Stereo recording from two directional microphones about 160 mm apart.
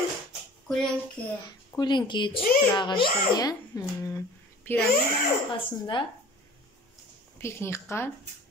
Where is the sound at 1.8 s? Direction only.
30° left (ahead or behind).